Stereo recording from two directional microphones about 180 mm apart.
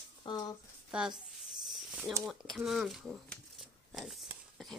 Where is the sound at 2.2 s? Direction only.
Centre (ahead or behind).